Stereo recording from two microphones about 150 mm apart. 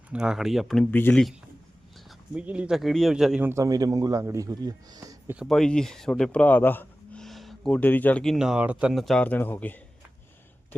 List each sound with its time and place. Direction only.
0.1 s speech: 5° right (ahead or behind)
0.9 s speech: 15° left (ahead or behind)
2.0 s speech: 5° right (ahead or behind)
3.4 s a man's voice: 20° right (ahead or behind)
5.5 s speech: 5° left (ahead or behind)